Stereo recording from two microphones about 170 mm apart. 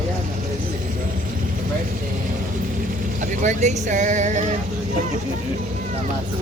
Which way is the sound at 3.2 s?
45° right (ahead or behind).